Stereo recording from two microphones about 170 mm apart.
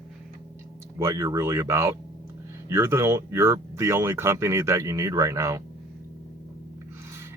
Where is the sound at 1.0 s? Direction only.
15° right (ahead or behind).